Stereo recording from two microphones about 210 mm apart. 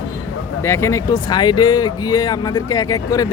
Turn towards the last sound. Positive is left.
turn(degrees=15)  # may be behind; listen again after turning